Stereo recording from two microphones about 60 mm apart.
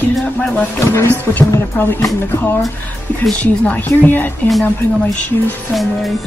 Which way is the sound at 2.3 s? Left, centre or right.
Left.